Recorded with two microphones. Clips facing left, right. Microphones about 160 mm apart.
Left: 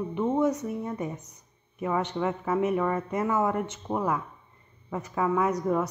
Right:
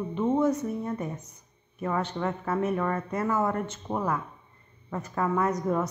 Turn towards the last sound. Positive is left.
turn(degrees=10)  # may be behind; listen again after turning